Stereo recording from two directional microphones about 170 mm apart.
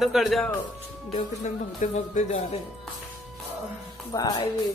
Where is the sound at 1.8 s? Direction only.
45° left (ahead or behind).